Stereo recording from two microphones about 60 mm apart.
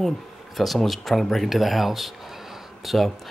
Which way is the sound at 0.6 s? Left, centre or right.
Centre.